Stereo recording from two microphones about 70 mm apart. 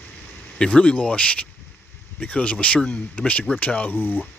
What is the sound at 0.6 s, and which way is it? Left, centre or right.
Speech, centre.